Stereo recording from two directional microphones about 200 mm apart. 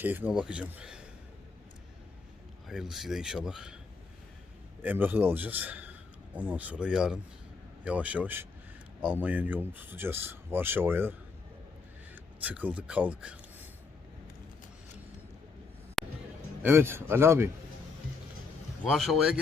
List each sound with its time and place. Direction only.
0.0 s speech: 10° right (ahead or behind)
2.6 s speech: centre (ahead or behind)
4.8 s a man's voice: 10° right (ahead or behind)
16.0 s music: centre (ahead or behind)
16.6 s speech: 10° right (ahead or behind)
18.9 s speech: centre (ahead or behind)